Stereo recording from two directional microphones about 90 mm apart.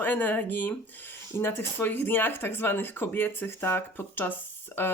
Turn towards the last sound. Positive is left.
turn(degrees=25)  # may be behind; listen again after turning